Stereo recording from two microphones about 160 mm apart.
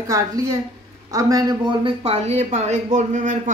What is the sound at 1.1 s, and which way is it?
A woman's voice, 25° right (ahead or behind).